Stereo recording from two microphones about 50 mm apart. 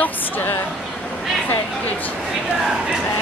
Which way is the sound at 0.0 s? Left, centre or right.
Left.